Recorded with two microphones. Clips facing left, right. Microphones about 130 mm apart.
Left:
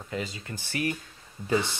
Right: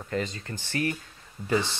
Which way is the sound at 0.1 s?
5° left (ahead or behind).